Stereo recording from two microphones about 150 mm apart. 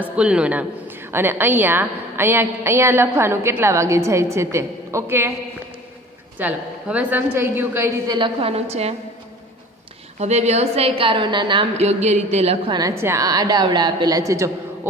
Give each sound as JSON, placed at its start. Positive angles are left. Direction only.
{"t": 0.0, "sound": "a woman's voice", "side_deg": -5}
{"t": 6.4, "sound": "a woman's voice", "side_deg": -10}
{"t": 8.0, "sound": "a woman's voice", "side_deg": -25}
{"t": 8.4, "sound": "speech", "side_deg": -40}
{"t": 10.2, "sound": "a woman's voice", "side_deg": -45}
{"t": 11.9, "sound": "speech", "side_deg": -50}
{"t": 12.7, "sound": "a woman's voice", "side_deg": -20}